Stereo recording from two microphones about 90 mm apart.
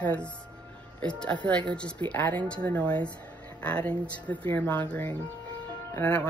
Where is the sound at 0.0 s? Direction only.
15° left (ahead or behind).